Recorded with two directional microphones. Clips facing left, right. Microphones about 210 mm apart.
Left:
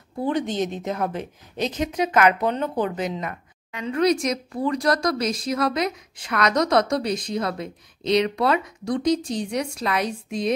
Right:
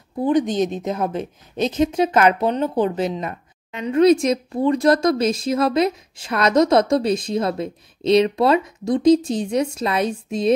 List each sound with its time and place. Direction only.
0.2 s a woman's voice: 15° right (ahead or behind)